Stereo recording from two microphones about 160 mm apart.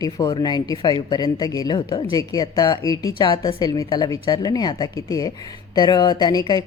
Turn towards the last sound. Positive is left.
turn(degrees=25)  # may be behind; listen again after turning